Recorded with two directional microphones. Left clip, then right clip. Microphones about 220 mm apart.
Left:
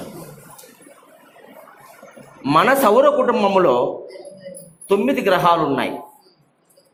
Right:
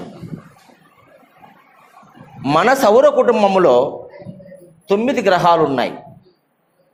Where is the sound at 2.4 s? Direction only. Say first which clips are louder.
Right 1 dB; 50° right (ahead or behind).